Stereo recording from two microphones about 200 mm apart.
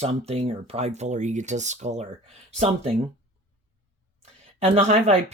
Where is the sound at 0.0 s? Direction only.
30° right (ahead or behind).